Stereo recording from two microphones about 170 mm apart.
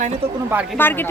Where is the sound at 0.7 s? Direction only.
10° left (ahead or behind).